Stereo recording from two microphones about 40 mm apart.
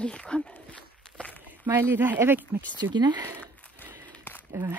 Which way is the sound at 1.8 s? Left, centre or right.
Right.